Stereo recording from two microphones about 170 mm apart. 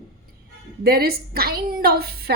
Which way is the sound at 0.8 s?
65° right (ahead or behind).